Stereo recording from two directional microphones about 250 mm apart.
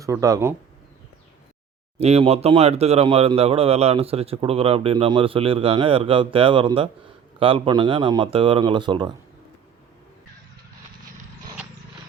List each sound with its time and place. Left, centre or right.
0.0 s speech: centre
2.0 s speech: right